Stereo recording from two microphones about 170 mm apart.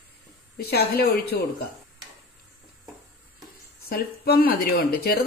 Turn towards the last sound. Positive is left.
turn(degrees=65)  # may be behind; listen again after turning